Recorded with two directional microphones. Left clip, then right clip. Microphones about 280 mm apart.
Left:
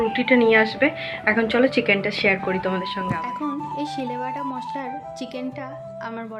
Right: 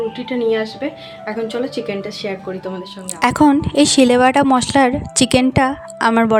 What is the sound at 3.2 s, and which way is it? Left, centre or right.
A woman's voice, right.